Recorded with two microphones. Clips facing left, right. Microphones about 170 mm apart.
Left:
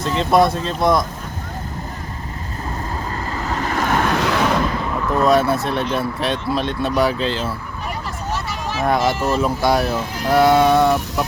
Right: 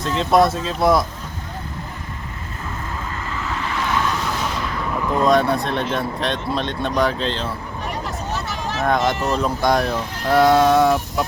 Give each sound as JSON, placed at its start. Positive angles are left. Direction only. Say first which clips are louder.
{"t": 0.0, "sound": "speech", "louder": "left 1 dB", "side_deg": 0}
{"t": 3.2, "sound": "vehicle", "louder": "left 3 dB", "side_deg": 40}
{"t": 5.2, "sound": "speech", "louder": "left 1 dB", "side_deg": 5}